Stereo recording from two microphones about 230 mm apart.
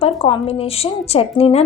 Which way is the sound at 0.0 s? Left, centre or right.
Left.